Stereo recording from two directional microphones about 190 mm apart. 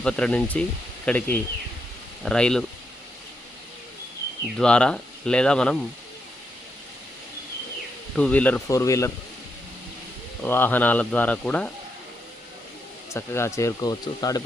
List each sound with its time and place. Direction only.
0.0 s speech: 5° left (ahead or behind)
4.5 s speech: 5° left (ahead or behind)
8.1 s speech: 5° left (ahead or behind)
10.4 s speech: 10° left (ahead or behind)
13.1 s speech: 15° left (ahead or behind)